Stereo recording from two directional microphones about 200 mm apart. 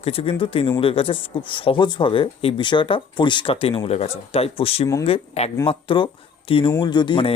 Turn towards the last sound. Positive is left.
turn(degrees=25)  # may be behind; listen again after turning